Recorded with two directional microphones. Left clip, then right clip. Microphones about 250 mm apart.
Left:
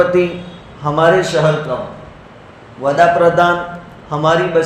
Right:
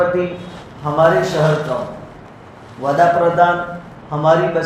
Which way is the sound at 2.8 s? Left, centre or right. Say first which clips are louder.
Left 3 dB; left.